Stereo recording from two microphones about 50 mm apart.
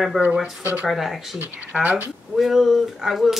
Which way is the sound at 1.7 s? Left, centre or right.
Right.